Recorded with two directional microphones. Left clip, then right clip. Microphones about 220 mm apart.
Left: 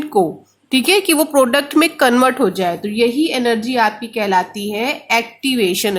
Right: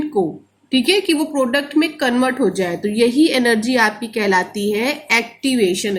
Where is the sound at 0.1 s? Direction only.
30° left (ahead or behind).